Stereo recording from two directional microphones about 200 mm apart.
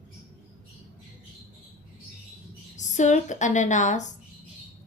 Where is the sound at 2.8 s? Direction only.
35° left (ahead or behind).